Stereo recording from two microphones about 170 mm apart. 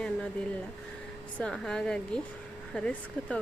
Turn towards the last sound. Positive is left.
turn(degrees=5)  # may be behind; listen again after turning